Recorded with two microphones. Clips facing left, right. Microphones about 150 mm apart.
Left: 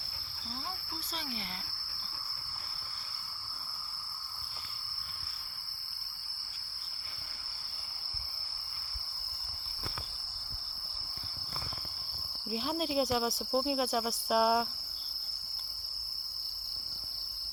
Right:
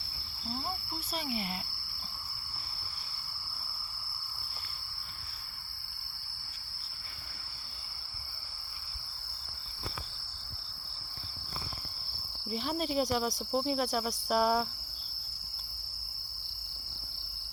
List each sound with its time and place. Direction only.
12.5 s cricket: 5° left (ahead or behind)